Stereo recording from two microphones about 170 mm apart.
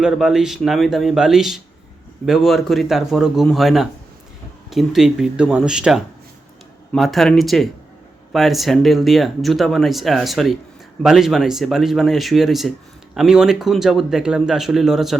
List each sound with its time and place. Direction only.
0.0 s speech: 5° right (ahead or behind)